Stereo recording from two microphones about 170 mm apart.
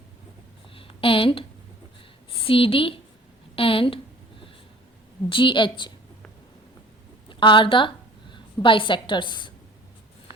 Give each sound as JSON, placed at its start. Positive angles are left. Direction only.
{"t": 0.8, "sound": "a woman's voice", "side_deg": 30}
{"t": 3.5, "sound": "a sound", "side_deg": 30}
{"t": 5.3, "sound": "a woman's voice", "side_deg": 30}
{"t": 7.3, "sound": "a woman's voice", "side_deg": 30}